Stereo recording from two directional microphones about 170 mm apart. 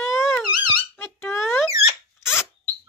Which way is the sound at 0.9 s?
15° left (ahead or behind).